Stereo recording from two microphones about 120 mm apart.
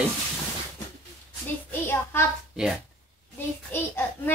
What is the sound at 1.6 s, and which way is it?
Speech, 15° left (ahead or behind).